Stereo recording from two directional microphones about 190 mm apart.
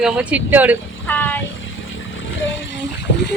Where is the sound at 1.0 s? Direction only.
10° left (ahead or behind).